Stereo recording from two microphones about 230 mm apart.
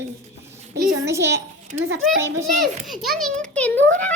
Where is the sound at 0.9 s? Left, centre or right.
Centre.